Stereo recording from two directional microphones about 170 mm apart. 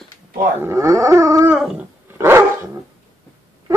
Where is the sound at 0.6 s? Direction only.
20° right (ahead or behind).